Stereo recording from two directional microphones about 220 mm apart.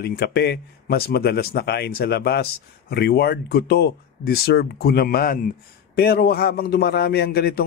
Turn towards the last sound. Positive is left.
turn(degrees=45)  # may be behind; listen again after turning